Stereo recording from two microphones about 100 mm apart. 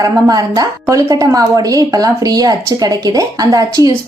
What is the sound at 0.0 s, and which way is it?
A woman's voice, 40° right (ahead or behind).